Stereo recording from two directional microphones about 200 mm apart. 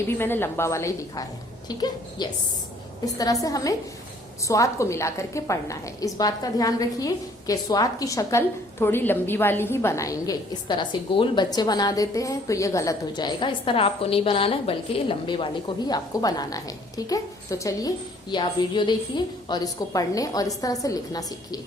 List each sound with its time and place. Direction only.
0.2 s a woman's voice: 10° left (ahead or behind)
3.4 s a woman's voice: 15° left (ahead or behind)